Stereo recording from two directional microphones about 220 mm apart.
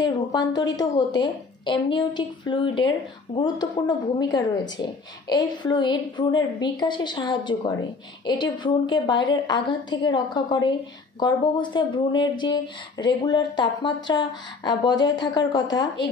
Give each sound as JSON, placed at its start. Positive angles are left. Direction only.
{"t": 0.0, "sound": "speech", "side_deg": 20}